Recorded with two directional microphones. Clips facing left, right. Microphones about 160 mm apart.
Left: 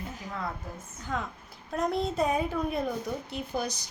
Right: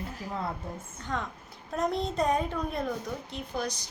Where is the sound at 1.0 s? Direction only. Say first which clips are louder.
Left 1 dB; 5° left (ahead or behind).